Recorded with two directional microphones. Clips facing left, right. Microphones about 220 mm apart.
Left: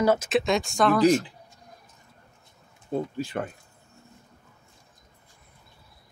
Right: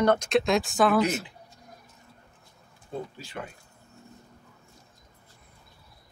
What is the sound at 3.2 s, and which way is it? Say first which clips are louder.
Speech: left 9 dB; 55° left (ahead or behind).